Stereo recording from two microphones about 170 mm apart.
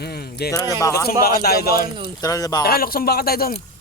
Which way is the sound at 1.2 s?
65° left (ahead or behind).